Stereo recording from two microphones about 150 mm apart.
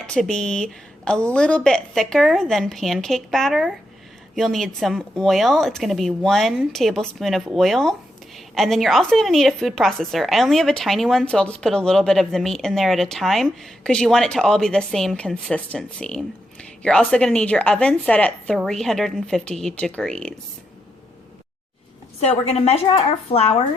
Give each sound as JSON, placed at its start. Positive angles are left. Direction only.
{"t": 0.0, "sound": "a woman's voice", "side_deg": 5}
{"t": 22.2, "sound": "speech", "side_deg": 45}